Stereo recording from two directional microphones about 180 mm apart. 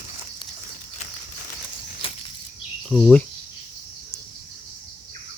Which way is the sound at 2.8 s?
Centre (ahead or behind).